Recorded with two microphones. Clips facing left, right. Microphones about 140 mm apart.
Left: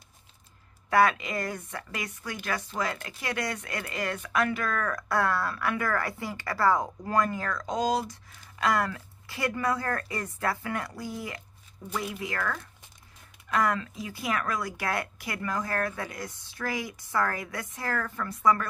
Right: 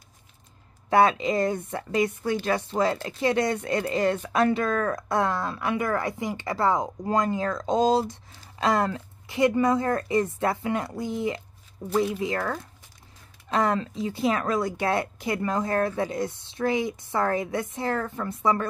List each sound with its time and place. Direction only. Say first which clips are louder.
0.8 s a woman's voice: right 3 dB; 25° right (ahead or behind)